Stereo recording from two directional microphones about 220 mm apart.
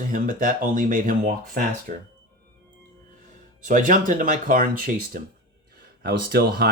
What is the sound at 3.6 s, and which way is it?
Speech, 35° right (ahead or behind).